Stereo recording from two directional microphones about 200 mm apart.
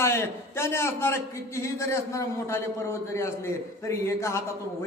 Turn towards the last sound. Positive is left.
turn(degrees=15)  # may be behind; listen again after turning